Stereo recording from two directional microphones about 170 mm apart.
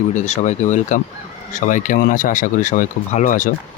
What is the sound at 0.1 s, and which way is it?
Speech, 45° left (ahead or behind).